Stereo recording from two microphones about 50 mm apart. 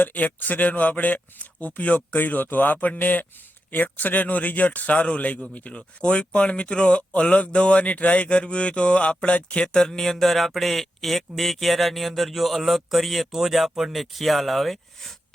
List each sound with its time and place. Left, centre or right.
0.0 s a man's voice: left; by 15.1 s centre